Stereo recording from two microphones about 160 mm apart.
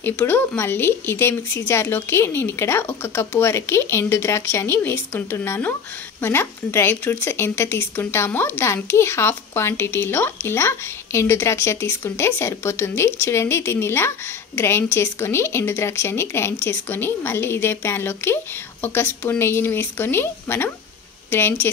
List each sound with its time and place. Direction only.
0.0 s speech: 15° left (ahead or behind)